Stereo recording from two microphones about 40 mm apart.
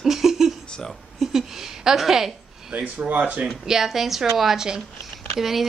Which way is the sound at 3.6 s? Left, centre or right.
Centre.